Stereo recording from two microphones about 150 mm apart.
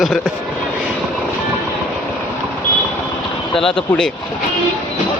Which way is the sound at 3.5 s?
35° left (ahead or behind).